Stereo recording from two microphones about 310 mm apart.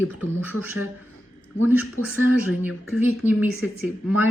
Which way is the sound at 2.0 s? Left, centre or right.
Left.